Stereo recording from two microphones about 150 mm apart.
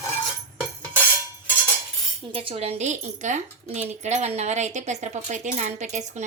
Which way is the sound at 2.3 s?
40° right (ahead or behind).